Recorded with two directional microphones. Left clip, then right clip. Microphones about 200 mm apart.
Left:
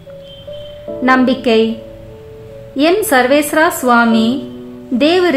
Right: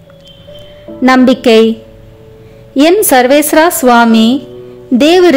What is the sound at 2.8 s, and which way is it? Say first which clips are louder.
Speech: right 5 dB; 40° right (ahead or behind).